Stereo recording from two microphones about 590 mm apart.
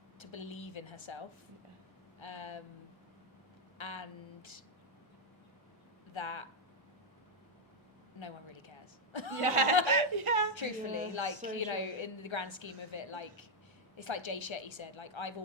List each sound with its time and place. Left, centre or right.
0.2 s a sound: left
2.1 s speech: left
3.8 s speech: left
6.1 s a woman's voice: left
8.2 s a sound: left
9.4 s speech: right
10.5 s a woman's voice: left